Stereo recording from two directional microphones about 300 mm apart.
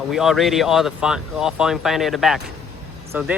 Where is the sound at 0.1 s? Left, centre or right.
Centre.